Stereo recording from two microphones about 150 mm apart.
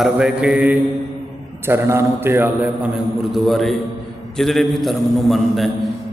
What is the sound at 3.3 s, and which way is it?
A man's voice, centre (ahead or behind).